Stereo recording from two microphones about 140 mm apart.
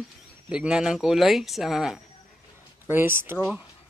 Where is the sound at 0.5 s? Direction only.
5° right (ahead or behind).